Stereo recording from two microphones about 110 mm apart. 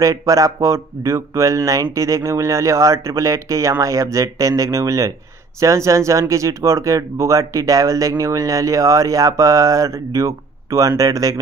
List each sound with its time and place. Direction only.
0.0 s speech: 30° right (ahead or behind)